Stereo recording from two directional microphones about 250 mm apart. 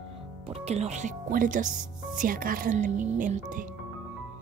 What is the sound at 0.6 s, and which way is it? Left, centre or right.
Speech, right.